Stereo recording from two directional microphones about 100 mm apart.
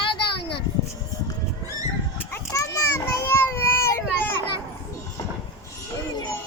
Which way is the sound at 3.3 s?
25° left (ahead or behind).